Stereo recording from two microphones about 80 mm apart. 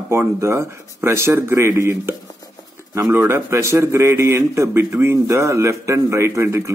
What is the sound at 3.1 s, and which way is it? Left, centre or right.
A man's voice, right.